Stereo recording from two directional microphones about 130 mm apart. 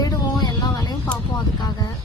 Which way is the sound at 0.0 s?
30° left (ahead or behind).